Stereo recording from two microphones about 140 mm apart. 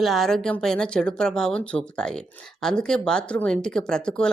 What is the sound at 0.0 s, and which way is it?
Speech, centre (ahead or behind).